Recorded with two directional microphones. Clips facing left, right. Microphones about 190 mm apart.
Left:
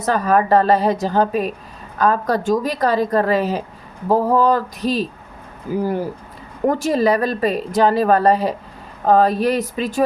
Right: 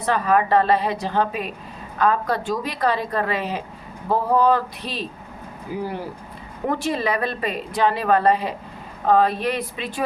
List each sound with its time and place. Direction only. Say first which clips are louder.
0.0 s a woman's voice: left 3 dB; 40° left (ahead or behind)